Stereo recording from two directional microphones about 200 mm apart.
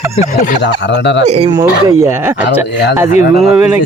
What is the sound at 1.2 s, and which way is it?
Speech, 30° right (ahead or behind).